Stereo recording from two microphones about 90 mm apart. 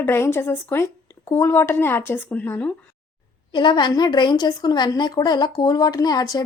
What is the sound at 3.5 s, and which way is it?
A woman's voice, 60° left (ahead or behind).